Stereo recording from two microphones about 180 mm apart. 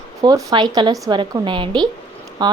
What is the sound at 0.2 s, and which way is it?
A woman's voice, 20° right (ahead or behind).